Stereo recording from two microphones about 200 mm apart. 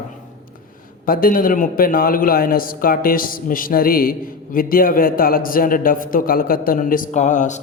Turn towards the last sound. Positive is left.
turn(degrees=40)  # may be behind; listen again after turning